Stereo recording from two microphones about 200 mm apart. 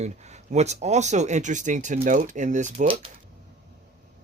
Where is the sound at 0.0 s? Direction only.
35° right (ahead or behind).